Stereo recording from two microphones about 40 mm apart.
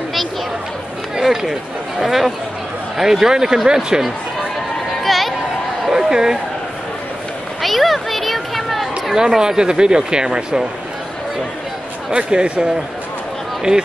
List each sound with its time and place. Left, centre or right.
1.1 s speech: centre
5.0 s chatter: centre
5.9 s a sound: centre
7.6 s a sound: centre
9.1 s speech: centre
12.1 s speech: right